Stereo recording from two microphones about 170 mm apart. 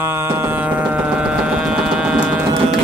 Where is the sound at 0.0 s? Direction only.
15° right (ahead or behind).